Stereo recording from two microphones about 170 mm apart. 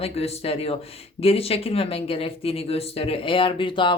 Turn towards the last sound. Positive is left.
turn(degrees=30)  # may be behind; listen again after turning